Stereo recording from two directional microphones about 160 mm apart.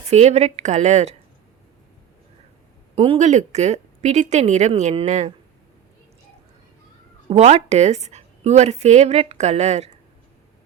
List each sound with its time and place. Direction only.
0.1 s speech: 40° right (ahead or behind)
2.9 s speech: 40° right (ahead or behind)
7.3 s speech: 40° right (ahead or behind)